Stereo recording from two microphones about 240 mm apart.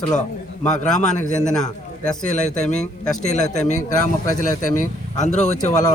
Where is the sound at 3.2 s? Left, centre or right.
Left.